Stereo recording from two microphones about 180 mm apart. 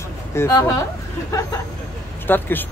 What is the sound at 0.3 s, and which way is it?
Speech, 15° left (ahead or behind).